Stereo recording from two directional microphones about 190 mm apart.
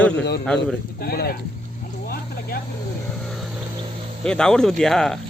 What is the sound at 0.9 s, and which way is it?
Speech, 55° left (ahead or behind).